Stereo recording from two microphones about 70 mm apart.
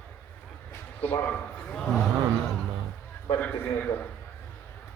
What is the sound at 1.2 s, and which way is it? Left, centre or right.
Speech, left.